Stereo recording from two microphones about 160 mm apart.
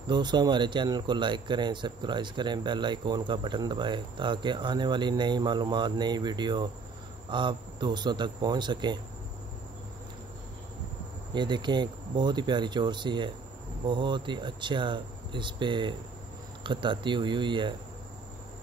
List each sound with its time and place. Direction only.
0.0 s speech: 30° right (ahead or behind)
11.3 s speech: 30° right (ahead or behind)